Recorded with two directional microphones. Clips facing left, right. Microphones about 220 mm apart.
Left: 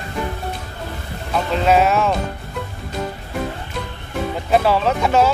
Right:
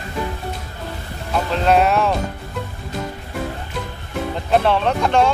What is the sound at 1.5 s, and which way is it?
Speech, centre (ahead or behind).